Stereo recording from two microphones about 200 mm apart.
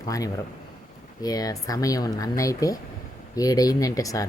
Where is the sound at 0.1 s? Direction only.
15° left (ahead or behind).